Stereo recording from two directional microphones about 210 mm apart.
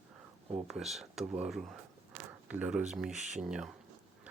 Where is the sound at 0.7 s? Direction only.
Centre (ahead or behind).